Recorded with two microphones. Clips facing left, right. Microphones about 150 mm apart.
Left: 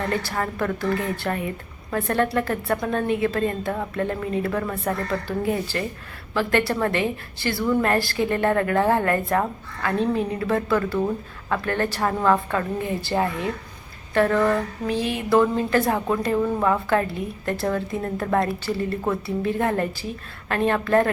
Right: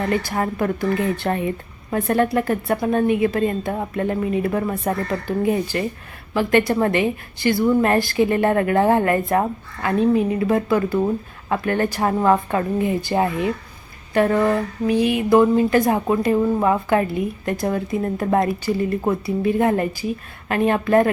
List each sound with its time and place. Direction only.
0.1 s a woman's voice: 15° right (ahead or behind)